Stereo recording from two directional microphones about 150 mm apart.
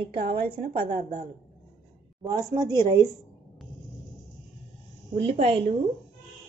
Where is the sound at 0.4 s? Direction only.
35° right (ahead or behind).